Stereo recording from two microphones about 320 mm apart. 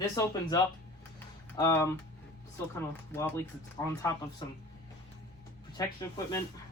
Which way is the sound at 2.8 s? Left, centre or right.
Centre.